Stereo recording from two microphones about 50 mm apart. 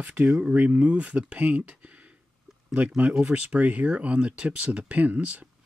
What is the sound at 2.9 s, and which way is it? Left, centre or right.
Speech, centre.